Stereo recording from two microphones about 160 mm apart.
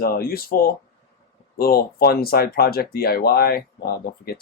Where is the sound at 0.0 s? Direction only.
70° left (ahead or behind).